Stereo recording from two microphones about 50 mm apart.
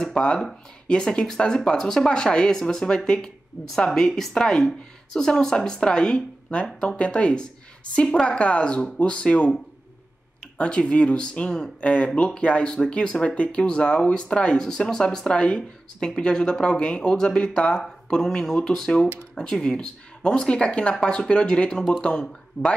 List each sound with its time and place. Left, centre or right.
0.2 s speech: centre
10.6 s speech: centre
11.8 s speech: left
22.6 s speech: left